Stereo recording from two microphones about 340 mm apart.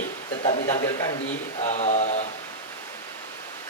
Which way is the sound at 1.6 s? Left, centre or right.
Left.